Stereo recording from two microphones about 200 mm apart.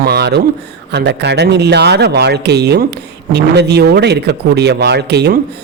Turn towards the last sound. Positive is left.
turn(degrees=-55)  # may be behind; listen again after turning